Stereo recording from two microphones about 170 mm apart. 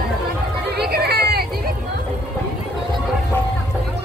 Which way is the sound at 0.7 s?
70° right (ahead or behind).